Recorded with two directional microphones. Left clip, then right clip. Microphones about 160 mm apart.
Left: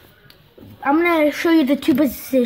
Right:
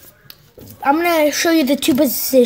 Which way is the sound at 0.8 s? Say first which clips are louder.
Right 2 dB; 20° right (ahead or behind).